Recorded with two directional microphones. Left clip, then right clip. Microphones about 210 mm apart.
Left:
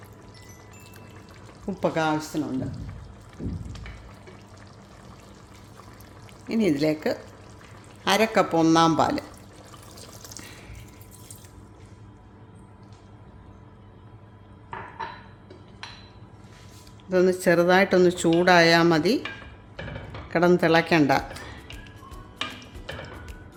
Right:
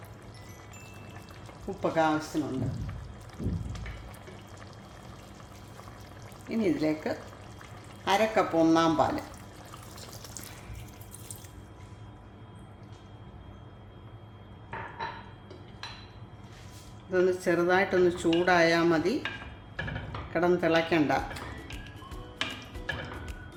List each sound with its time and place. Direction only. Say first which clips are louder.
1.8 s speech: left 2 dB; 50° left (ahead or behind)
3.4 s a sound: left 2 dB; 5° right (ahead or behind)
6.5 s speech: left 5 dB; 50° left (ahead or behind)
17.1 s speech: left 6 dB; 50° left (ahead or behind)
20.3 s speech: left 6 dB; 50° left (ahead or behind)